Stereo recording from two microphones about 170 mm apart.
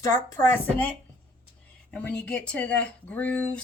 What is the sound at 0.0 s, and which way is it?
Speech, 20° left (ahead or behind).